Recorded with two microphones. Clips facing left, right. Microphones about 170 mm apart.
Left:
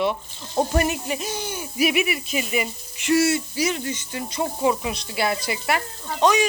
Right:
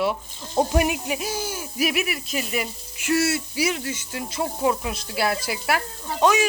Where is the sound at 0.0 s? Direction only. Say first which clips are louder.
Left 1 dB; 10° right (ahead or behind).